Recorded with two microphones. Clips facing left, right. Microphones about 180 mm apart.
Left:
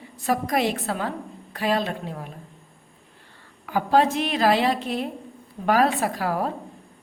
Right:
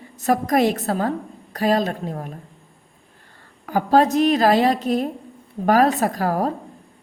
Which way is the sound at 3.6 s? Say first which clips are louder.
Right 3 dB; 40° right (ahead or behind).